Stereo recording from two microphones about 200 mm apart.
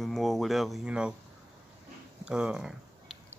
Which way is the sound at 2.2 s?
5° right (ahead or behind).